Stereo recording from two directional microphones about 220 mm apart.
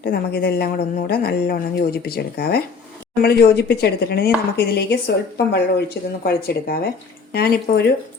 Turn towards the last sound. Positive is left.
turn(degrees=45)  # may be behind; listen again after turning